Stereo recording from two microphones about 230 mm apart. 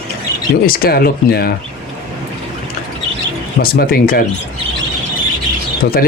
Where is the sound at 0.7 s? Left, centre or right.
Left.